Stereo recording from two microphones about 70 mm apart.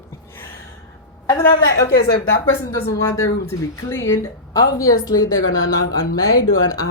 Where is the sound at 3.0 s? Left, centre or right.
Left.